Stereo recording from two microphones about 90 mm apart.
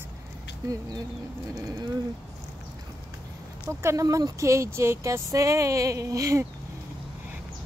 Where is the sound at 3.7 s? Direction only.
30° right (ahead or behind).